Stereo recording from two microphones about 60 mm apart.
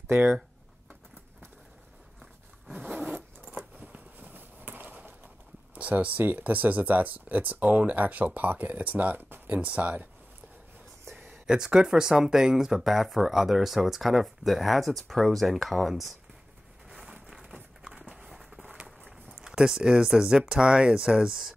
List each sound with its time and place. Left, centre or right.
0.1 s speech: right
2.7 s zipper: right
3.7 s a sound: right
5.8 s speech: right
11.1 s a sound: right
11.4 s speech: centre
16.9 s rain: centre
17.8 s horse: centre
19.3 s speech: centre